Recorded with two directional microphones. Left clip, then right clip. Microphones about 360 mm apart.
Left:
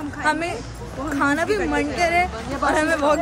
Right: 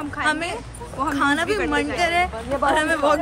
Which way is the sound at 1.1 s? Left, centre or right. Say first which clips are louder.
Left 1 dB; centre.